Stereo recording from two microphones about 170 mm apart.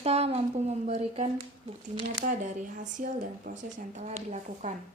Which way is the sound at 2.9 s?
50° right (ahead or behind).